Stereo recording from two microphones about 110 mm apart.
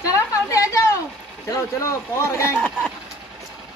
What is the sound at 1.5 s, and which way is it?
Speech, 25° left (ahead or behind).